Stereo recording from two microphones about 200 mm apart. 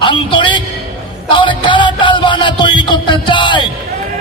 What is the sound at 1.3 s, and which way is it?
Music, 25° left (ahead or behind).